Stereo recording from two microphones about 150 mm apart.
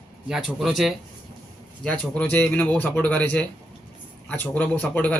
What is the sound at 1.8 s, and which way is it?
A man's voice, 10° left (ahead or behind).